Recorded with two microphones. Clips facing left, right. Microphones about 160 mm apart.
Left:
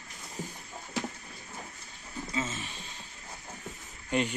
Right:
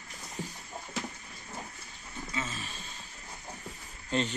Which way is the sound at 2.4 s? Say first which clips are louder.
Left 3 dB; 25° left (ahead or behind).